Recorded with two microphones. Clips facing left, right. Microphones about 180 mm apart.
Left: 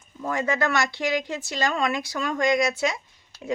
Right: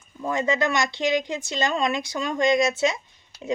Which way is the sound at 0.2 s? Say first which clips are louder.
Right 2 dB; 20° right (ahead or behind).